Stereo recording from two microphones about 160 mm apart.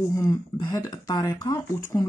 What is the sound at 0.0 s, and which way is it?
Speech, 15° left (ahead or behind).